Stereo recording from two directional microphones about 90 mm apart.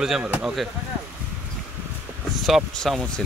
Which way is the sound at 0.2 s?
15° right (ahead or behind).